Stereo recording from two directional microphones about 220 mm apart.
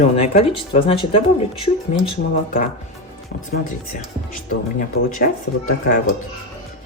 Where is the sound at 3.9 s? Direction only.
40° left (ahead or behind).